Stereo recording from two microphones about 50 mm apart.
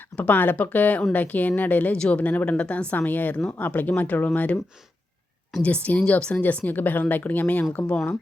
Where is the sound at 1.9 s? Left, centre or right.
Left.